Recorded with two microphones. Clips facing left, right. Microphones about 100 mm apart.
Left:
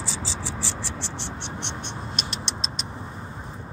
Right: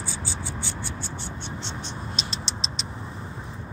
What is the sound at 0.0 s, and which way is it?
Frog, 90° left.